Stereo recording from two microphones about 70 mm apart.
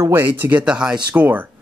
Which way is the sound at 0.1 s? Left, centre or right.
Right.